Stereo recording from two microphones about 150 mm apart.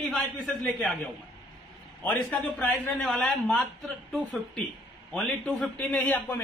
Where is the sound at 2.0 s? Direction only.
10° left (ahead or behind).